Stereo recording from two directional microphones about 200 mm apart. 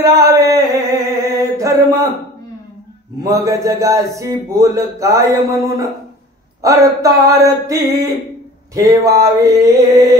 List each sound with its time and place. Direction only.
0.0 s mantra: 15° right (ahead or behind)
3.2 s a man's voice: 15° right (ahead or behind)